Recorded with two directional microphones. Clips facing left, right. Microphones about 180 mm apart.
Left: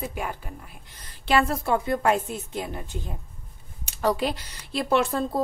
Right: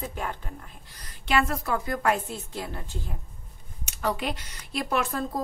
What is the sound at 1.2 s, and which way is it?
Speech, 30° left (ahead or behind).